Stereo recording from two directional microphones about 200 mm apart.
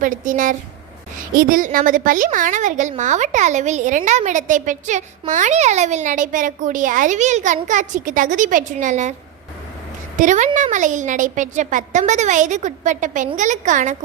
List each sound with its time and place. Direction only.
0.0 s a woman's voice: 40° right (ahead or behind)
10.2 s a woman's voice: 40° right (ahead or behind)